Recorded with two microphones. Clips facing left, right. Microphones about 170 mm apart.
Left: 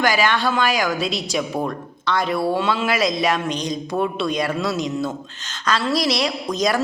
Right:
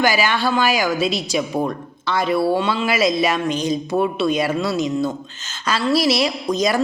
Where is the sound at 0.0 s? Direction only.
5° right (ahead or behind).